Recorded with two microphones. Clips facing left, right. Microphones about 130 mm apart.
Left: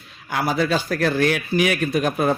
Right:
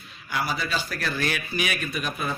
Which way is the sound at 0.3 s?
60° left (ahead or behind).